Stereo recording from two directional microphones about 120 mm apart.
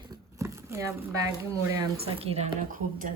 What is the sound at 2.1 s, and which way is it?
Speech, 60° right (ahead or behind).